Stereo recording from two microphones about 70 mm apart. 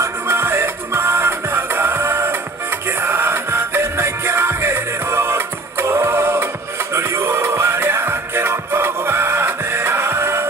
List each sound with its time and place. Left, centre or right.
0.0 s music: right